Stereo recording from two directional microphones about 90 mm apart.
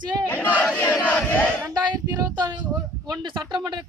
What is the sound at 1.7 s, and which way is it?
Speech, 50° right (ahead or behind).